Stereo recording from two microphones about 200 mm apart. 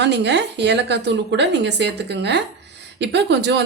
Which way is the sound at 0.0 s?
60° right (ahead or behind).